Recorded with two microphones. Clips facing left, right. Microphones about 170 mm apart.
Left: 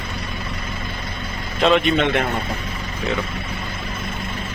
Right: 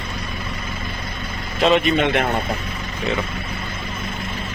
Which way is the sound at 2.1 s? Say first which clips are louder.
Right 2 dB; 60° right (ahead or behind).